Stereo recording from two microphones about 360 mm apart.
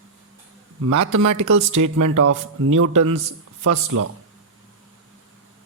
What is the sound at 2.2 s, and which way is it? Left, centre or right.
Speech, right.